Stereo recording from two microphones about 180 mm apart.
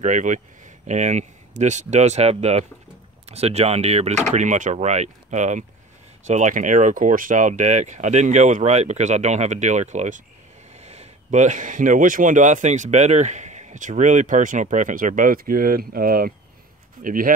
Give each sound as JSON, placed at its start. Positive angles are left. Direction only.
{"t": 0.0, "sound": "speech", "side_deg": -45}